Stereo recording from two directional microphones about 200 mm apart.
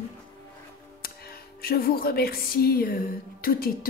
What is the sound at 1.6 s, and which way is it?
Speech, 50° left (ahead or behind).